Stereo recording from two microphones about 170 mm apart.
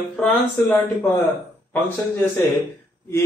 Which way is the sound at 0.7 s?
10° left (ahead or behind).